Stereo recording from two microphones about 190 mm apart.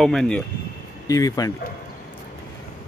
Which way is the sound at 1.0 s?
20° left (ahead or behind).